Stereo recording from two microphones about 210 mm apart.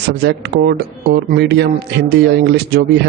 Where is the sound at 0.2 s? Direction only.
50° right (ahead or behind).